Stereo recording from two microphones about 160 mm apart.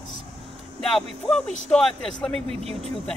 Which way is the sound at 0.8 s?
5° left (ahead or behind).